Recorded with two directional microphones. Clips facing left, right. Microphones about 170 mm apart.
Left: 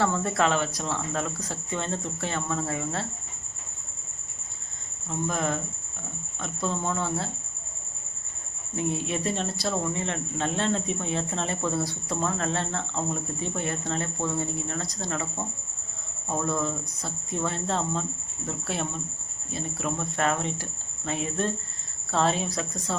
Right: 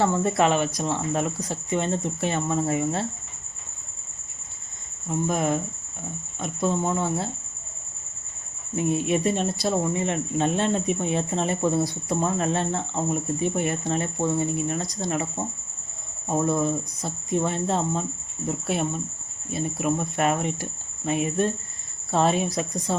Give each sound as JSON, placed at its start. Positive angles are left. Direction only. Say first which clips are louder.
{"t": 0.0, "sound": "speech", "louder": "right 4 dB", "side_deg": -20}
{"t": 5.0, "sound": "speech", "louder": "right 4 dB", "side_deg": -15}
{"t": 8.7, "sound": "speech", "louder": "right 6 dB", "side_deg": -15}